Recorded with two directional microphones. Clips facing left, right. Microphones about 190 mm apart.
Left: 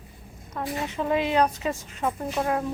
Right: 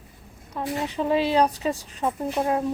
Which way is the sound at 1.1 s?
30° right (ahead or behind).